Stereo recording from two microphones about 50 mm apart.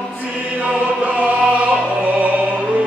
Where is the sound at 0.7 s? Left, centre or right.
Right.